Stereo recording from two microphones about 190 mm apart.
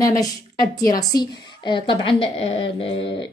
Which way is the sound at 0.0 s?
20° left (ahead or behind).